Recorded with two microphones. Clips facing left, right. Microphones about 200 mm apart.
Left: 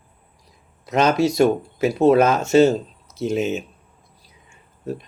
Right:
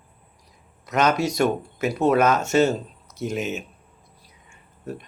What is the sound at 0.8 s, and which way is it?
Speech, 30° left (ahead or behind).